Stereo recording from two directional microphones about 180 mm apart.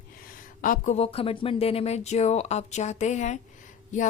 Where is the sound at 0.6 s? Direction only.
45° left (ahead or behind).